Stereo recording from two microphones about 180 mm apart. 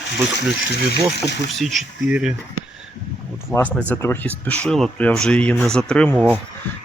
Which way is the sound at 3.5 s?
Centre (ahead or behind).